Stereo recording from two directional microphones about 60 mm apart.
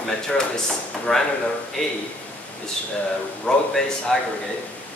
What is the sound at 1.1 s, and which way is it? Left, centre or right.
Speech, centre.